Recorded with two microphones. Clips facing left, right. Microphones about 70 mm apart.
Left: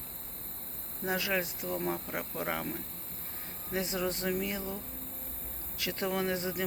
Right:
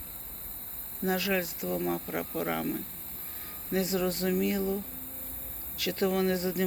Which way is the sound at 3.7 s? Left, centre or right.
Left.